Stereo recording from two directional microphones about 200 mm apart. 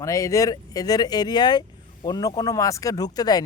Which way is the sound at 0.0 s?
15° left (ahead or behind).